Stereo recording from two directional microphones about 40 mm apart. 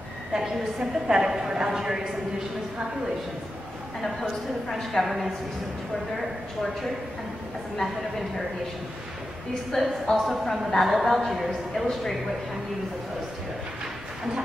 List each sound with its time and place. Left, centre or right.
0.3 s a woman's voice: centre
4.0 s a woman's voice: centre
5.0 s speech: centre
9.7 s a woman's voice: centre